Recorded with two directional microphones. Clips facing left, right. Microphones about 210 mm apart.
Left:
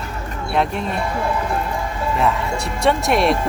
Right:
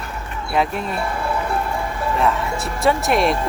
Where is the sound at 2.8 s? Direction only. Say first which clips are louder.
Left 1 dB; centre (ahead or behind).